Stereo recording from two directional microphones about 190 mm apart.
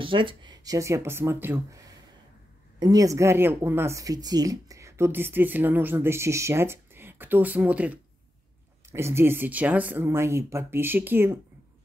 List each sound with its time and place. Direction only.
0.0 s speech: 25° right (ahead or behind); by 11.3 s 10° right (ahead or behind)